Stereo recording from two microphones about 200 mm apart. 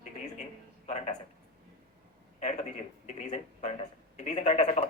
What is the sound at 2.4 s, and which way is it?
Speech, 35° left (ahead or behind).